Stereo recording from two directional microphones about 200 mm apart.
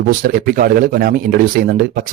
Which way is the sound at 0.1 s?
45° right (ahead or behind).